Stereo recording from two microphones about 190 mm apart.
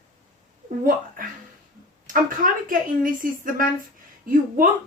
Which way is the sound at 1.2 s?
45° right (ahead or behind).